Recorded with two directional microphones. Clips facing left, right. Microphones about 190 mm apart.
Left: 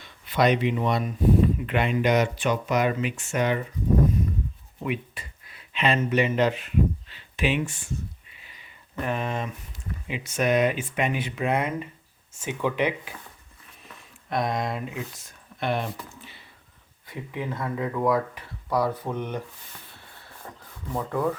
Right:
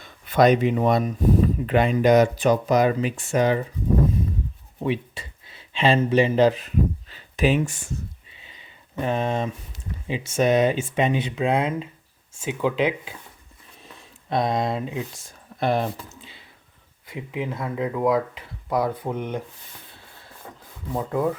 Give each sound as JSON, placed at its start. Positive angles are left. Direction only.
{"t": 0.0, "sound": "speech", "side_deg": -45}
{"t": 4.8, "sound": "speech", "side_deg": -30}
{"t": 8.3, "sound": "a sound", "side_deg": -25}
{"t": 10.1, "sound": "speech", "side_deg": -25}
{"t": 13.8, "sound": "speech", "side_deg": -30}
{"t": 15.6, "sound": "speech", "side_deg": -40}
{"t": 17.1, "sound": "speech", "side_deg": -15}
{"t": 20.5, "sound": "rub", "side_deg": -15}
{"t": 20.9, "sound": "speech", "side_deg": -15}